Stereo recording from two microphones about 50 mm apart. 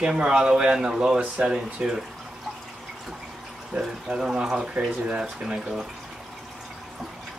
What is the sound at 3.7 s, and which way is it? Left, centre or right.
Speech, centre.